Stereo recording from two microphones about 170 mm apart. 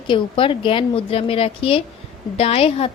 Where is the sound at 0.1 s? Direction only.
30° left (ahead or behind).